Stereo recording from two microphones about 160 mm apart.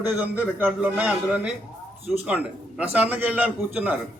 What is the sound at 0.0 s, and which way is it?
A man's voice, 10° right (ahead or behind).